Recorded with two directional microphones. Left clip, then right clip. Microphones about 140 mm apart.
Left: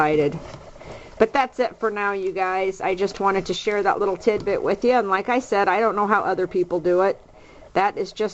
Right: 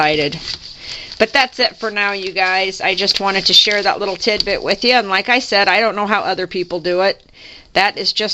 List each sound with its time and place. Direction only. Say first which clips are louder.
0.0 s speech: right 4 dB; 25° right (ahead or behind)
3.7 s speech: right 4 dB; 30° right (ahead or behind)